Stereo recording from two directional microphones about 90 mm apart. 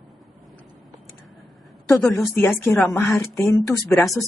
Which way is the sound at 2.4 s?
25° left (ahead or behind).